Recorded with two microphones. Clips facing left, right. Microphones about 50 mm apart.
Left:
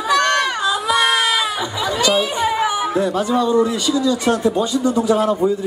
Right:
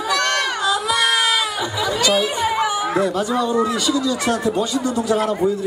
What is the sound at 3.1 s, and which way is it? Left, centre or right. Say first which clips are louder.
A man's voice: left 3 dB; left.